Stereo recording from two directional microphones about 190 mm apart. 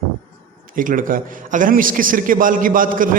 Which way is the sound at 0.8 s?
45° right (ahead or behind).